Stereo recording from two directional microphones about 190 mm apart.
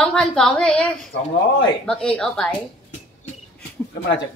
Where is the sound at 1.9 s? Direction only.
5° left (ahead or behind).